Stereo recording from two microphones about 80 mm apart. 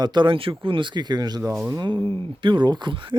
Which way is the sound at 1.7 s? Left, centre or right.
Right.